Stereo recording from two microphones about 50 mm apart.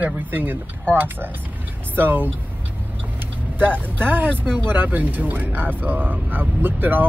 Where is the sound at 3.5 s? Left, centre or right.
Right.